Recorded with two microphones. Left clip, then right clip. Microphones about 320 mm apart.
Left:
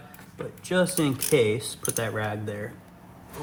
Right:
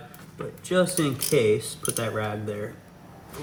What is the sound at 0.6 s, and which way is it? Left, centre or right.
Speech, centre.